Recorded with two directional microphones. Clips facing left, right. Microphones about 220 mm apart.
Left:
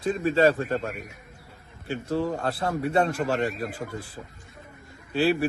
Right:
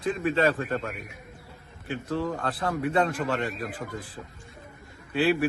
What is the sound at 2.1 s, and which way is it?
Speech, 25° left (ahead or behind).